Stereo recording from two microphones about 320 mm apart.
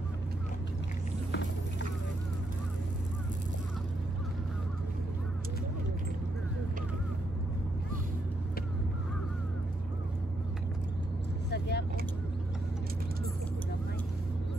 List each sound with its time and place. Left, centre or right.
1.3 s vehicle: left
11.5 s vehicle: left